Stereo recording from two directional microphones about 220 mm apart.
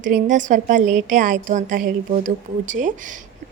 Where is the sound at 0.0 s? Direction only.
35° right (ahead or behind).